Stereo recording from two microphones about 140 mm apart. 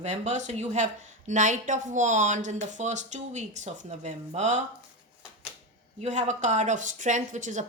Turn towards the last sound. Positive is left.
turn(degrees=-60)  # may be behind; listen again after turning